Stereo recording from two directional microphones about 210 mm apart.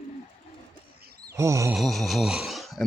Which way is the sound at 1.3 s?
15° right (ahead or behind).